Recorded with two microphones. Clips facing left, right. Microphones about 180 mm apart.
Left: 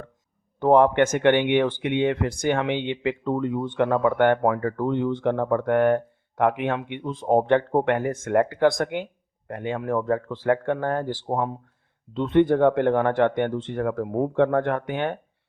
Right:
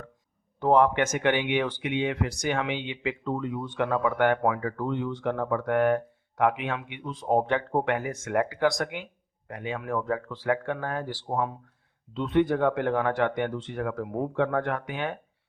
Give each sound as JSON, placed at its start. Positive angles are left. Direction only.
{"t": 0.6, "sound": "speech", "side_deg": 55}